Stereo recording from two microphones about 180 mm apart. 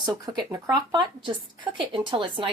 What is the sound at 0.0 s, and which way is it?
A woman's voice, 20° right (ahead or behind).